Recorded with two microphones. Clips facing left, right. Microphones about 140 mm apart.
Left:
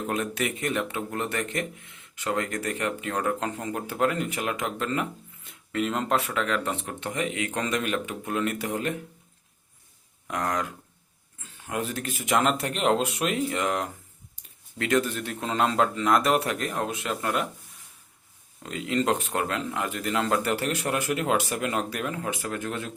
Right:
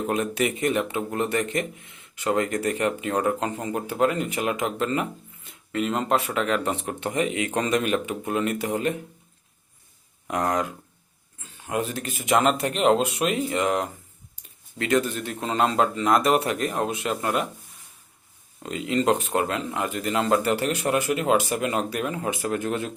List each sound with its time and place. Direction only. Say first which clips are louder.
0.1 s speech: right 4 dB; 10° right (ahead or behind)
10.2 s speech: right 4 dB; 20° right (ahead or behind)
11.7 s speech: right 3 dB; 5° right (ahead or behind)
14.8 s speech: right 2 dB; 5° right (ahead or behind)
18.6 s speech: right 3 dB; 10° right (ahead or behind)